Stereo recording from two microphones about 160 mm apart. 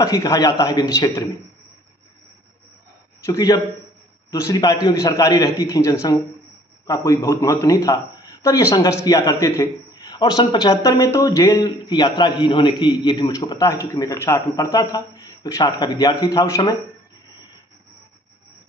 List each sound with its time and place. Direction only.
0.0 s a man's voice: 20° left (ahead or behind)
3.3 s a man's voice: 25° left (ahead or behind)